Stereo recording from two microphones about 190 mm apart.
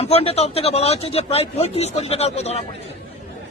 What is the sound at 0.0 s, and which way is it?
Speech, 30° left (ahead or behind).